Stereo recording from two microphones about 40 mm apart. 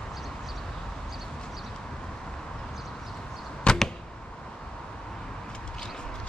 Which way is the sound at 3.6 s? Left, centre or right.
Centre.